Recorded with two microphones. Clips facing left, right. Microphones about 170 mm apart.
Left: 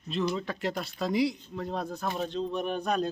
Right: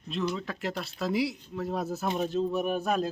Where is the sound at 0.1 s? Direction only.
Centre (ahead or behind).